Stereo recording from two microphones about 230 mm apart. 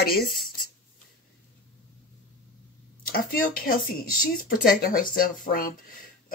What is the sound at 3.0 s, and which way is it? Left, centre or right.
Speech, left.